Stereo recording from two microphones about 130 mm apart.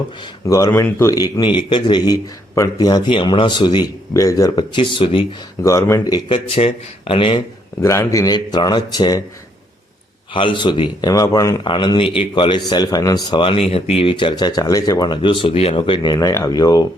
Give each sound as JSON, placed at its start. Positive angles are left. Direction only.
{"t": 0.4, "sound": "speech", "side_deg": 25}
{"t": 1.1, "sound": "a man's voice", "side_deg": 30}
{"t": 4.1, "sound": "a man's voice", "side_deg": 25}
{"t": 5.6, "sound": "speech", "side_deg": 25}
{"t": 7.8, "sound": "speech", "side_deg": 20}
{"t": 10.3, "sound": "a man's voice", "side_deg": 40}
{"t": 11.6, "sound": "a man's voice", "side_deg": 35}
{"t": 16.1, "sound": "speech", "side_deg": 25}